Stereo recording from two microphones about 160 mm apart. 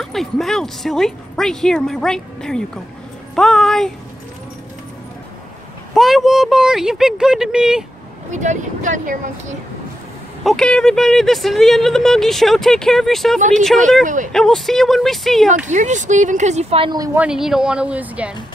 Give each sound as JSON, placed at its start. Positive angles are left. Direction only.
{"t": 0.0, "sound": "speech", "side_deg": 0}
{"t": 5.9, "sound": "speech", "side_deg": 0}
{"t": 8.3, "sound": "speech", "side_deg": -50}
{"t": 10.4, "sound": "speech", "side_deg": 5}
{"t": 14.0, "sound": "speech", "side_deg": -55}
{"t": 14.3, "sound": "speech", "side_deg": 0}
{"t": 15.7, "sound": "speech", "side_deg": -50}
{"t": 16.9, "sound": "speech", "side_deg": -20}
{"t": 17.2, "sound": "speech", "side_deg": -5}